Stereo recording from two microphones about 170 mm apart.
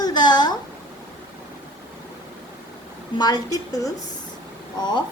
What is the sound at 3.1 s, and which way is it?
A woman's voice, 25° left (ahead or behind).